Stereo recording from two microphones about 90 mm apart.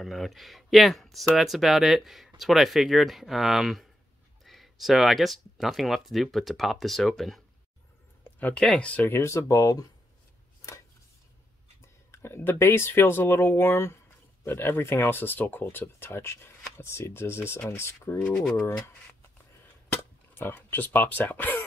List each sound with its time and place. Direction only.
0.0 s speech: centre (ahead or behind)
8.2 s speech: 15° left (ahead or behind); by 9.8 s 40° left (ahead or behind)
12.1 s speech: 25° left (ahead or behind)
18.2 s speech: 10° left (ahead or behind)
18.7 s speech: 25° left (ahead or behind)